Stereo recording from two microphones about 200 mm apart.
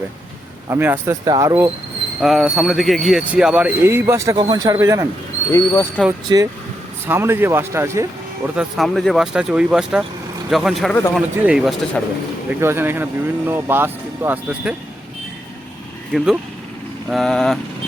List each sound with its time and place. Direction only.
0.7 s speech: 10° right (ahead or behind)
2.2 s speech: centre (ahead or behind)
5.5 s speech: 15° left (ahead or behind)
6.2 s speech: 20° right (ahead or behind)
8.5 s speech: centre (ahead or behind)
12.5 s speech: 10° right (ahead or behind)
16.1 s speech: centre (ahead or behind)